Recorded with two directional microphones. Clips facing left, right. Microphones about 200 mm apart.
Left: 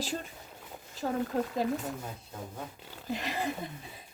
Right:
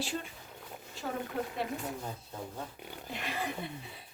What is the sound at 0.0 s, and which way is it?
Speech, 40° left (ahead or behind).